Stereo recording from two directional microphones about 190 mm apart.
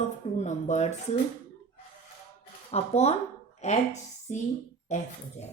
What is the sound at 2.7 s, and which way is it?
Speech, 35° left (ahead or behind).